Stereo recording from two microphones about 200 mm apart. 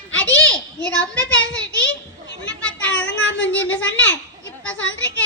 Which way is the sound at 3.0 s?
65° left (ahead or behind).